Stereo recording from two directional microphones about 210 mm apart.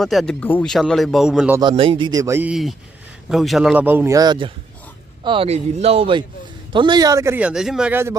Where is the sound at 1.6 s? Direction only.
25° right (ahead or behind).